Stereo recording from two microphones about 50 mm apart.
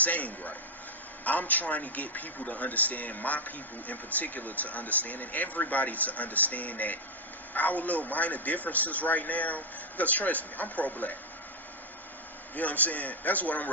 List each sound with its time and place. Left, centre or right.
0.0 s a man's voice: left
12.5 s a man's voice: left